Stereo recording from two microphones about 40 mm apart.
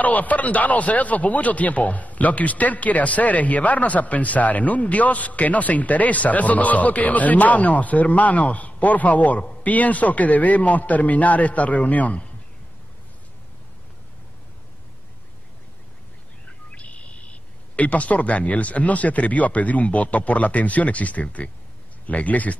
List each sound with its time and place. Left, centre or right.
0.0 s speech: left
16.7 s a sound: left
17.7 s speech: left